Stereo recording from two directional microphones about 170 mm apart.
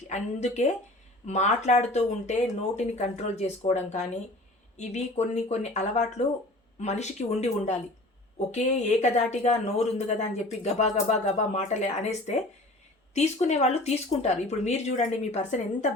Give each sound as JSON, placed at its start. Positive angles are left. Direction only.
{"t": 0.1, "sound": "speech", "side_deg": 40}